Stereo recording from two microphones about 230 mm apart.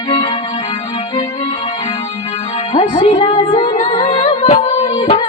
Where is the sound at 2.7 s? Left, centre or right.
Left.